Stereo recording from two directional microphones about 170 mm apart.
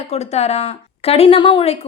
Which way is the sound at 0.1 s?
40° left (ahead or behind).